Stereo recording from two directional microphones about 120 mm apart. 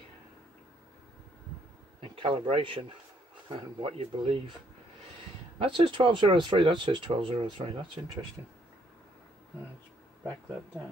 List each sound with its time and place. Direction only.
2.0 s speech: 50° right (ahead or behind)
5.6 s speech: 45° right (ahead or behind)